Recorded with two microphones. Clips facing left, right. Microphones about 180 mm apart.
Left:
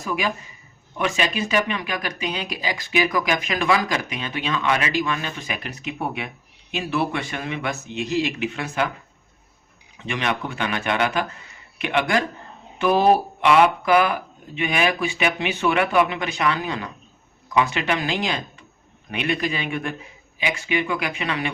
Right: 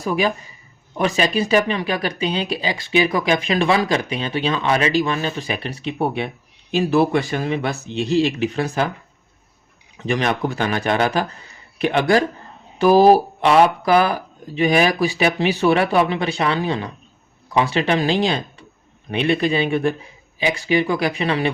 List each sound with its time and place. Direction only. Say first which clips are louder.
0.0 s speech: right 5 dB; 30° right (ahead or behind)
10.0 s speech: right 5 dB; 40° right (ahead or behind)